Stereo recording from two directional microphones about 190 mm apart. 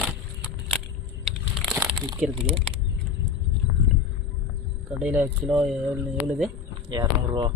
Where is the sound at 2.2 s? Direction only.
5° right (ahead or behind).